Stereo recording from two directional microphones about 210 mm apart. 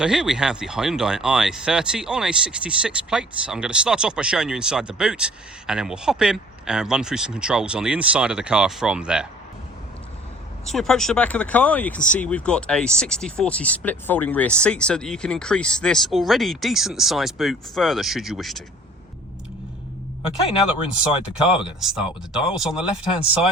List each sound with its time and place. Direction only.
0.0 s speech: 5° right (ahead or behind)
10.7 s speech: centre (ahead or behind)
21.1 s speech: 25° left (ahead or behind)
21.8 s speech: centre (ahead or behind)